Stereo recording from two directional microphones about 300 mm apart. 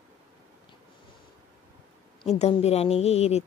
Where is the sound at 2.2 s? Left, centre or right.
Left.